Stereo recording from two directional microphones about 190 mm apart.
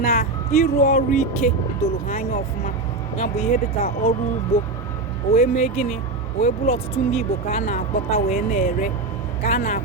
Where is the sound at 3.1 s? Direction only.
35° left (ahead or behind).